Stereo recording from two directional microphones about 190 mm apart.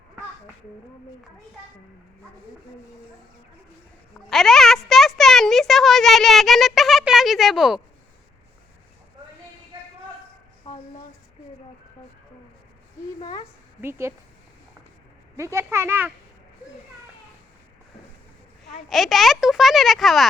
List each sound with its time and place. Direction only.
4.3 s a sound: centre (ahead or behind)
13.1 s speech: 30° left (ahead or behind)
15.4 s a child's voice: 15° right (ahead or behind)
18.9 s speech: centre (ahead or behind)